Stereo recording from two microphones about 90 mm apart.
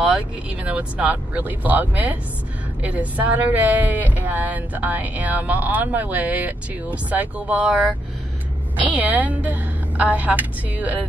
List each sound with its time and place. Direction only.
0.7 s speech: 15° right (ahead or behind)